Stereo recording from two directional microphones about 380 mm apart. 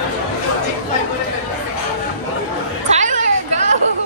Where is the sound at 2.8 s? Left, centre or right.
Centre.